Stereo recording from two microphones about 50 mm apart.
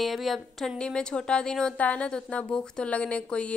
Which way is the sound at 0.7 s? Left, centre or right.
Centre.